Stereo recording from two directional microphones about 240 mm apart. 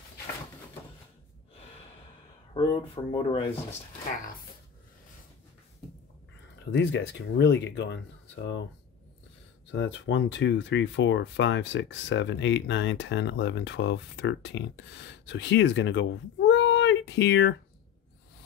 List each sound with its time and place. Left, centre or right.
2.5 s speech: left
6.6 s speech: left
9.7 s speech: left